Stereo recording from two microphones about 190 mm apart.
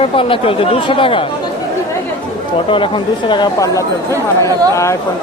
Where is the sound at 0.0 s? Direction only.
30° left (ahead or behind).